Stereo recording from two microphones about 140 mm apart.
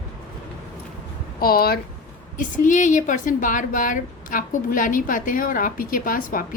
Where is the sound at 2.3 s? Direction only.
65° left (ahead or behind).